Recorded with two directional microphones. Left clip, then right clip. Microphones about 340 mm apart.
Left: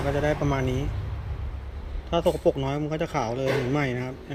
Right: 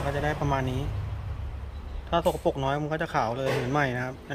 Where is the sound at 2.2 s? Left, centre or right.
Right.